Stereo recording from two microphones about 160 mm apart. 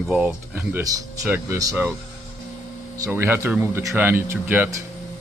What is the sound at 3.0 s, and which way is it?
Speech, 15° right (ahead or behind).